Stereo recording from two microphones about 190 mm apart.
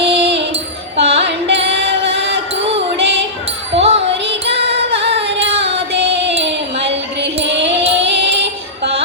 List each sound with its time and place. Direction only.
0.0 s music: 30° right (ahead or behind)
4.9 s carnatic music: 30° right (ahead or behind)
7.5 s music: 30° right (ahead or behind)
8.3 s music: 60° right (ahead or behind)